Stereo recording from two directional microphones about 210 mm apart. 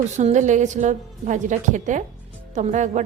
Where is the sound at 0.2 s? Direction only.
35° right (ahead or behind).